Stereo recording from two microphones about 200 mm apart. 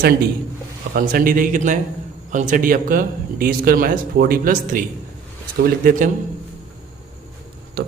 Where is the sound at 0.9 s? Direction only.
45° right (ahead or behind).